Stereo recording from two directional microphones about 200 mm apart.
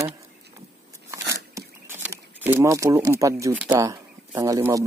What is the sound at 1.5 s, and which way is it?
Speech, 10° right (ahead or behind).